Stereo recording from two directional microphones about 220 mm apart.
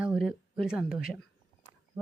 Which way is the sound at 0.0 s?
5° right (ahead or behind).